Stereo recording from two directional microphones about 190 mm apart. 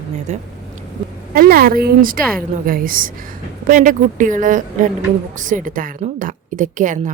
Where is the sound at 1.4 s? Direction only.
50° right (ahead or behind).